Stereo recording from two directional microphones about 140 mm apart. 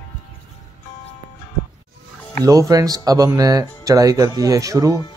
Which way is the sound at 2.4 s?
25° right (ahead or behind).